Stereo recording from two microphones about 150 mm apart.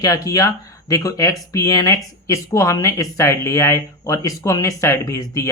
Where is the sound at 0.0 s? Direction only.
25° left (ahead or behind).